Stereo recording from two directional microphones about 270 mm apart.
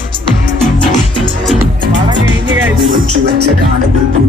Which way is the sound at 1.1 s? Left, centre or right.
Centre.